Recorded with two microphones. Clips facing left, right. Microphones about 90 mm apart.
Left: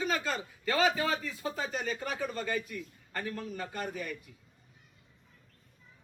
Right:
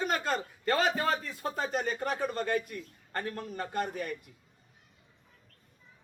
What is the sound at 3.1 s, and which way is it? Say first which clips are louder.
A man's voice: right 1 dB; 35° right (ahead or behind).